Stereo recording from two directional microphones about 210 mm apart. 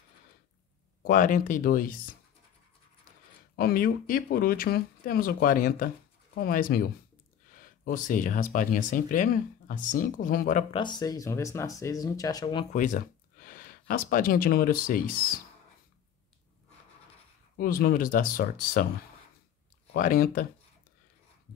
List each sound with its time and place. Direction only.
1.0 s speech: 40° left (ahead or behind)
3.5 s speech: 45° left (ahead or behind)
10.7 s speech: 20° left (ahead or behind)
12.7 s speech: 40° left (ahead or behind)
17.6 s speech: 45° left (ahead or behind)
19.9 s speech: 45° left (ahead or behind)